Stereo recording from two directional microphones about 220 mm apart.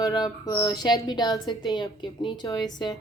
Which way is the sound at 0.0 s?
15° left (ahead or behind).